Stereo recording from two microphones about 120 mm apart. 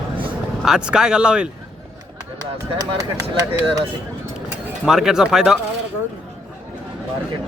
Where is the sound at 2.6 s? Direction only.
30° right (ahead or behind).